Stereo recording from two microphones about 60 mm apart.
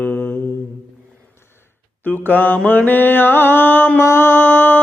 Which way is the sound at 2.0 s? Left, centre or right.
Left.